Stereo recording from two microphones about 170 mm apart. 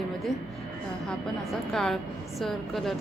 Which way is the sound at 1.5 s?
Centre (ahead or behind).